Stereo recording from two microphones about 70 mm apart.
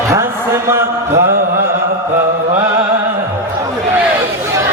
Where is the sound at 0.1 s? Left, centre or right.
Right.